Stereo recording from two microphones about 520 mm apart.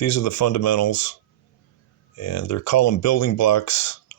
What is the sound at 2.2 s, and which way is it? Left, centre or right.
Speech, left.